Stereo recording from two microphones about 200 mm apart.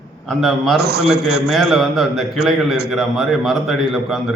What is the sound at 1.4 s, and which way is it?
A man's voice, centre (ahead or behind).